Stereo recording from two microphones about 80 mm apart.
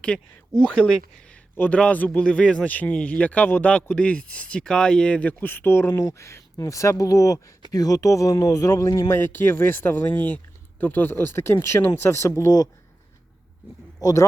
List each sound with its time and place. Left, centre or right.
0.6 s a man's voice: centre
1.5 s a man's voice: left
6.0 s speech: left
9.0 s speech: left
14.0 s speech: left